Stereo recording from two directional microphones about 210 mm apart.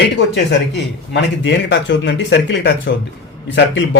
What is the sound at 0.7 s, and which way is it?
Speech, 55° left (ahead or behind).